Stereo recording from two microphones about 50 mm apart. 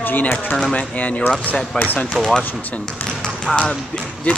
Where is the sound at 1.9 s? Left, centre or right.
Centre.